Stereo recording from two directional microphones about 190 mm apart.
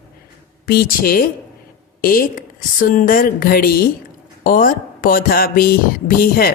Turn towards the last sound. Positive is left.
turn(degrees=50)  # may be behind; listen again after turning